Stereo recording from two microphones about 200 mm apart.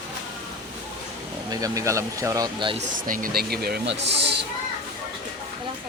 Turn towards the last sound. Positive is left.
turn(degrees=-60)  # may be behind; listen again after turning